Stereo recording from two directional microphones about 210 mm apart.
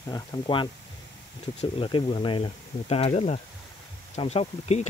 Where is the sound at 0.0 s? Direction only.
20° left (ahead or behind).